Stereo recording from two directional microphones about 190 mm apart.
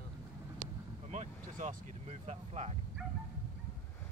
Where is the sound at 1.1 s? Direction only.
40° right (ahead or behind).